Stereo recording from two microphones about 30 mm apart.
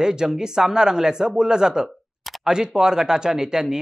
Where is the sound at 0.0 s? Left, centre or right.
Right.